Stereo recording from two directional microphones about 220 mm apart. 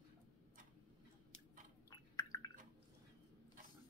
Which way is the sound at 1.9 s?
15° left (ahead or behind).